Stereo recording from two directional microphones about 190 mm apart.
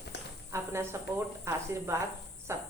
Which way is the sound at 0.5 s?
15° right (ahead or behind).